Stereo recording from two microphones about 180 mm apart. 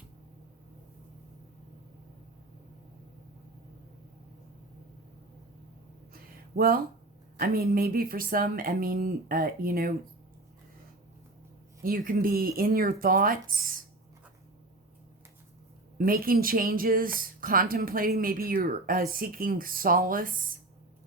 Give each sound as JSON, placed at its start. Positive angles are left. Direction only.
{"t": 6.1, "sound": "a sound", "side_deg": -55}
{"t": 7.3, "sound": "speech", "side_deg": -55}
{"t": 11.8, "sound": "speech", "side_deg": -50}
{"t": 16.0, "sound": "speech", "side_deg": -50}